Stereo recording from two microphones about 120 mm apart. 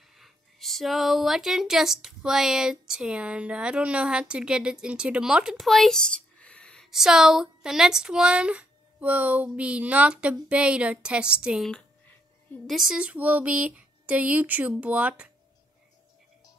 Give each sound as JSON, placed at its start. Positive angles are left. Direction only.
{"t": 0.1, "sound": "speech", "side_deg": 0}